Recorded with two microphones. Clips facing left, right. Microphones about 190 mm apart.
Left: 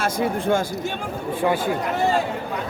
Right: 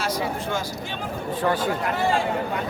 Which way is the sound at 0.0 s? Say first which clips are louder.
Left 4 dB; 50° left (ahead or behind).